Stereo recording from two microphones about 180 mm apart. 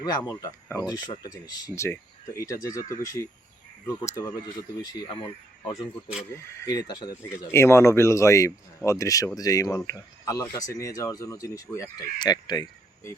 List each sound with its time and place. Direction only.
0.0 s speech: 20° left (ahead or behind)
3.8 s speech: 20° left (ahead or behind)